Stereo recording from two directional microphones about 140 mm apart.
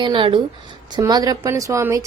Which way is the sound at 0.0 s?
35° right (ahead or behind).